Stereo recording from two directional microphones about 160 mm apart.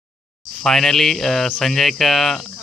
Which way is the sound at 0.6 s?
Centre (ahead or behind).